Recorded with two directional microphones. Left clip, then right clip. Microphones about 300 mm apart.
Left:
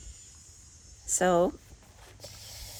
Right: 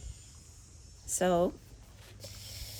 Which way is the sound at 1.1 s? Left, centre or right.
Left.